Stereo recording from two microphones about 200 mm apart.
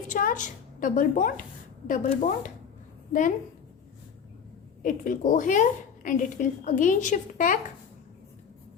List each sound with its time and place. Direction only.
0.1 s a woman's voice: 40° left (ahead or behind)
4.8 s a woman's voice: 40° left (ahead or behind)